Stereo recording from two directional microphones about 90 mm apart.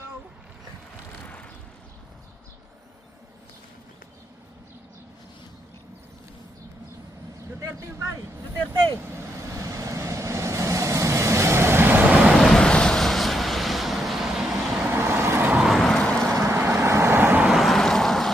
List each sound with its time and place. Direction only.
7.8 s speech: 35° right (ahead or behind)
9.0 s vehicle: 30° right (ahead or behind)
12.2 s vehicle: 5° left (ahead or behind)
14.8 s vehicle: 25° right (ahead or behind)
15.5 s vehicle: centre (ahead or behind)
16.3 s vehicle: 25° right (ahead or behind)
17.5 s vehicle: centre (ahead or behind)